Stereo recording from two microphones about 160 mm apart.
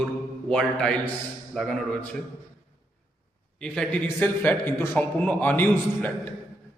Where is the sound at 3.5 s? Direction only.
5° left (ahead or behind).